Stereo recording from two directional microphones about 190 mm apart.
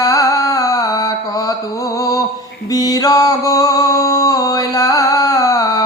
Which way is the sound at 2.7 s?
20° left (ahead or behind).